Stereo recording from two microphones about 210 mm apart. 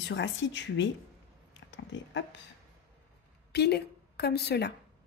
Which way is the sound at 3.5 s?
50° left (ahead or behind).